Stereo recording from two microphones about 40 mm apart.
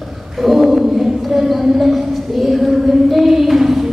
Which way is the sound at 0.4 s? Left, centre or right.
Centre.